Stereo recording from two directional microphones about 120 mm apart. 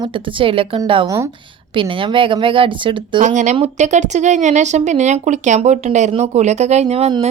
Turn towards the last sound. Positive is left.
turn(degrees=-60)  # may be behind; listen again after turning